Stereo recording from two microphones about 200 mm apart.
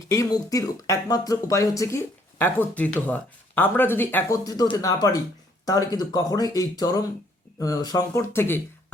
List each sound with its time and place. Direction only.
0.1 s speech: 15° left (ahead or behind)